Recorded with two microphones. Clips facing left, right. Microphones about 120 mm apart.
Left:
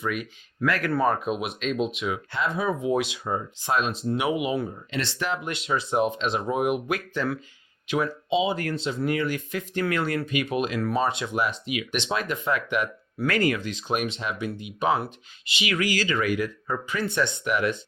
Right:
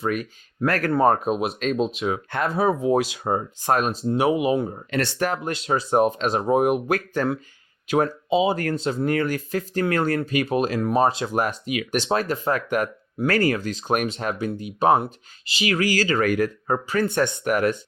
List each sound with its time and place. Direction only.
0.0 s speech: 40° right (ahead or behind)
4.1 s speech: 35° right (ahead or behind)
4.7 s speech: 50° right (ahead or behind)